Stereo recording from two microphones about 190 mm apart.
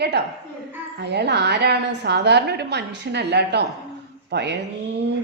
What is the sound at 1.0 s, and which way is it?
A woman's voice, 65° right (ahead or behind).